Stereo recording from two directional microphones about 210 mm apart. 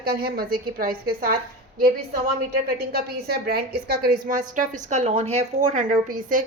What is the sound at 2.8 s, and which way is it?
A woman's voice, 50° right (ahead or behind).